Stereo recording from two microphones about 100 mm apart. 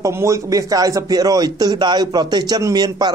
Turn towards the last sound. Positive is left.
turn(degrees=-40)  # may be behind; listen again after turning